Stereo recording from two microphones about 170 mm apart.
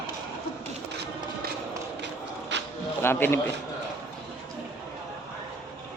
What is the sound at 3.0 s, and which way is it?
Speech, 15° left (ahead or behind).